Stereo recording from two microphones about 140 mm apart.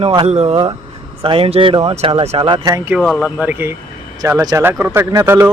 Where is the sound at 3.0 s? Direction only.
Centre (ahead or behind).